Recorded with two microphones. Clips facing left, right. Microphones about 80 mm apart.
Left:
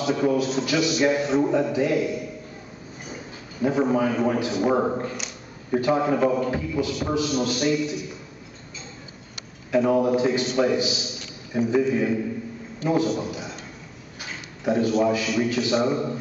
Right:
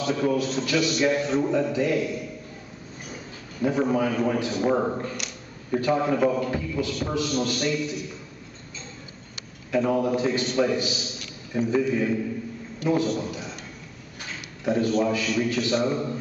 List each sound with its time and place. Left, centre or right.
0.0 s a man's voice: centre
3.6 s a man's voice: centre
9.8 s a man's voice: centre
14.6 s a man's voice: centre